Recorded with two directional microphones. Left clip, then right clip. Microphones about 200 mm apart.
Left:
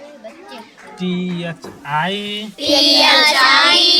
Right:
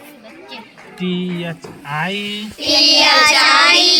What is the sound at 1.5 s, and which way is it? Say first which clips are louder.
Speech: left 3 dB; 5° left (ahead or behind).